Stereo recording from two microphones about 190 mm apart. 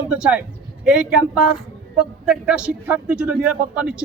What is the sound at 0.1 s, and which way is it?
A man's voice, 5° right (ahead or behind).